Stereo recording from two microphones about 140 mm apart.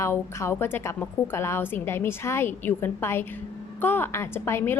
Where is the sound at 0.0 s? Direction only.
20° left (ahead or behind).